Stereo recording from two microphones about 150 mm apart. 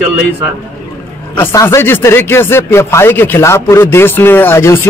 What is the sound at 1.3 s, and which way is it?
Speech, 15° left (ahead or behind).